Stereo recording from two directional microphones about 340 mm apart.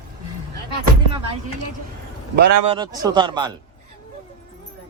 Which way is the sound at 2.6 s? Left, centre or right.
Centre.